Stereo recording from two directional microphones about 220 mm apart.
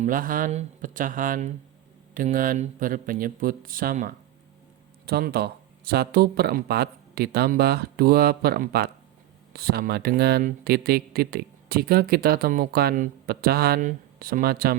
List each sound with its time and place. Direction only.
0.0 s speech: 40° right (ahead or behind)